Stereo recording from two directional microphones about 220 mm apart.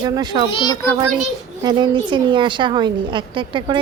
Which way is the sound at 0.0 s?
20° right (ahead or behind).